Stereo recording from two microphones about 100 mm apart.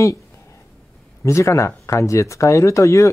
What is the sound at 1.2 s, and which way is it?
Speech, 30° left (ahead or behind).